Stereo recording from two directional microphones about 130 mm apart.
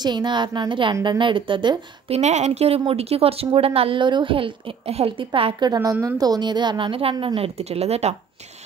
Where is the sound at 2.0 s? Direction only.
55° right (ahead or behind).